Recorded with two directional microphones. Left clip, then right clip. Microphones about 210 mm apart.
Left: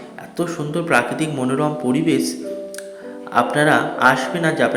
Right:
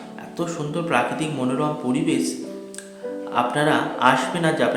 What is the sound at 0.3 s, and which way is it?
Speech, 10° left (ahead or behind).